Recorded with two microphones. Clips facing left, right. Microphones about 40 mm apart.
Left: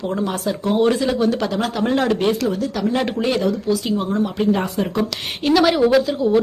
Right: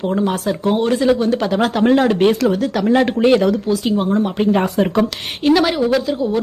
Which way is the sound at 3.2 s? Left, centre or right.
Right.